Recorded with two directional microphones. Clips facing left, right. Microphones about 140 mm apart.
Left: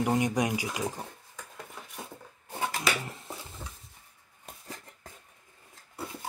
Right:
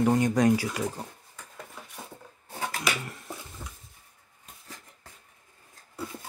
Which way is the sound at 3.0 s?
30° left (ahead or behind).